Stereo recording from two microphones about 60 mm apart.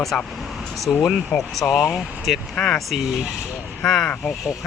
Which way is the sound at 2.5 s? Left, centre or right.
Centre.